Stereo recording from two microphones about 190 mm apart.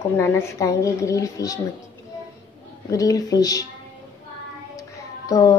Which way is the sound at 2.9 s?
20° left (ahead or behind).